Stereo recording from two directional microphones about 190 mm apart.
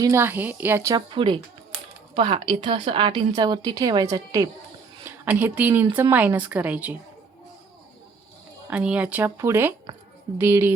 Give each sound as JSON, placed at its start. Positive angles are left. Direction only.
{"t": 0.0, "sound": "a woman's voice", "side_deg": -15}
{"t": 8.7, "sound": "speech", "side_deg": -5}